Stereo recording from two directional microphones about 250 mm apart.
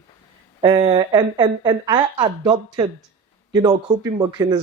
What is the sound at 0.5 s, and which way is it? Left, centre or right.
A woman's voice, right.